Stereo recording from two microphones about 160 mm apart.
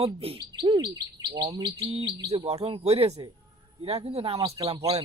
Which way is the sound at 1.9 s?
35° right (ahead or behind).